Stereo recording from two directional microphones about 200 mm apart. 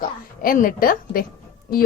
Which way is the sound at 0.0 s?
45° left (ahead or behind).